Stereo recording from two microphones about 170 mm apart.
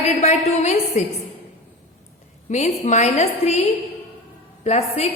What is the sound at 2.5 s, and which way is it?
A woman's voice, 45° left (ahead or behind).